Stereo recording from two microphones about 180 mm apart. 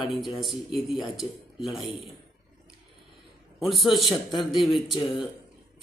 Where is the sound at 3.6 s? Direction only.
Centre (ahead or behind).